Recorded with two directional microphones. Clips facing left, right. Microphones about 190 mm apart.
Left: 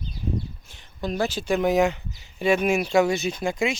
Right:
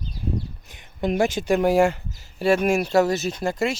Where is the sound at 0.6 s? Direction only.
20° right (ahead or behind).